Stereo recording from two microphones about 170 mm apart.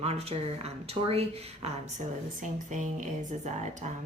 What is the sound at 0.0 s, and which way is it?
A woman's voice, 35° right (ahead or behind).